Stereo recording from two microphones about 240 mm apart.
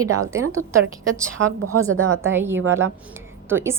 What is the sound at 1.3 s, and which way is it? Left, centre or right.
A woman's voice, right.